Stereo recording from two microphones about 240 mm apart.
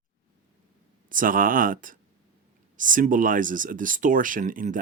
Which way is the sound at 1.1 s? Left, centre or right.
Right.